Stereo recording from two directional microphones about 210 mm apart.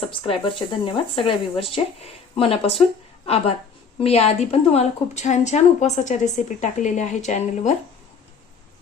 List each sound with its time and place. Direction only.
0.1 s a woman's voice: 25° left (ahead or behind)